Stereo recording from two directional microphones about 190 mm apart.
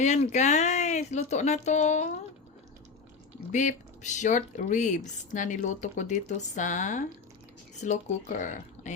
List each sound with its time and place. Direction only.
0.0 s speech: 40° left (ahead or behind)
3.5 s speech: 40° left (ahead or behind)